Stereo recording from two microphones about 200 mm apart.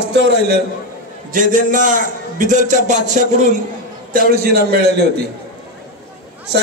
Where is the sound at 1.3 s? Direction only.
40° right (ahead or behind).